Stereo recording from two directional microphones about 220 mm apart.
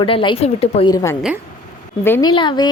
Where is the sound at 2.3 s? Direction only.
20° left (ahead or behind).